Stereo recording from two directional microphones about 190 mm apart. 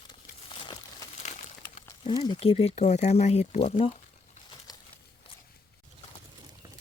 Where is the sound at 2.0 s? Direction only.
25° left (ahead or behind).